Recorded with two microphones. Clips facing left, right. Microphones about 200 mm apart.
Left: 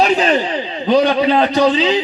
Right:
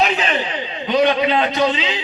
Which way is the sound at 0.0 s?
35° left (ahead or behind).